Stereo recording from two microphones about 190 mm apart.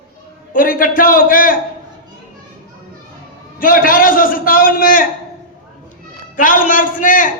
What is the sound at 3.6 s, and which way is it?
A man's voice, 45° left (ahead or behind).